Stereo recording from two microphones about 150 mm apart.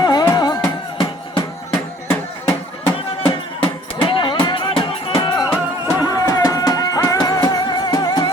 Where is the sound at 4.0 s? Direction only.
35° left (ahead or behind).